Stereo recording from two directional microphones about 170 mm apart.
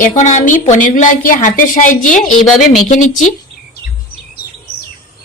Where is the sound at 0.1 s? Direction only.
45° left (ahead or behind).